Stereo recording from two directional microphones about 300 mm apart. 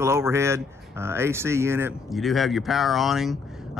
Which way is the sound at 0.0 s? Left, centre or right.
Centre.